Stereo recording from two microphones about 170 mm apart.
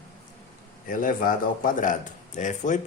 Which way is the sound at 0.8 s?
55° left (ahead or behind).